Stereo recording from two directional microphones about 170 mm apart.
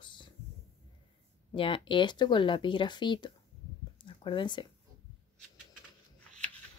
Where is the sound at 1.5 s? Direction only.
30° left (ahead or behind).